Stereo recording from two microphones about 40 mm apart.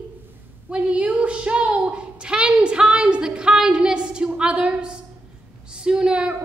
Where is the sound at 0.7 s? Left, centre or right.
Right.